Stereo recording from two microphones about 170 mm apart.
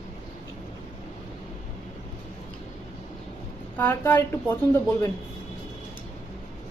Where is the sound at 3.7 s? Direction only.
10° left (ahead or behind).